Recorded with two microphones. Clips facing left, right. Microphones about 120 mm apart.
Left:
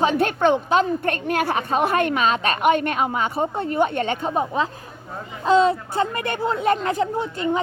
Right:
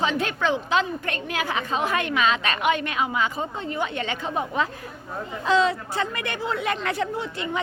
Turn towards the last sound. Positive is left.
turn(degrees=40)  # may be behind; listen again after turning